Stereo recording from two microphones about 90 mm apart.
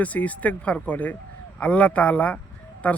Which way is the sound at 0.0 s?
15° left (ahead or behind).